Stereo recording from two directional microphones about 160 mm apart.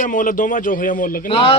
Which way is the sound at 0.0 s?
55° left (ahead or behind).